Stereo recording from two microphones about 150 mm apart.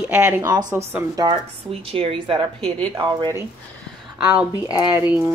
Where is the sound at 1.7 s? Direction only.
40° right (ahead or behind).